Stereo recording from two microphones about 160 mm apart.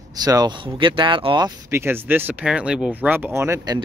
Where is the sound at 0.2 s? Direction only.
25° right (ahead or behind).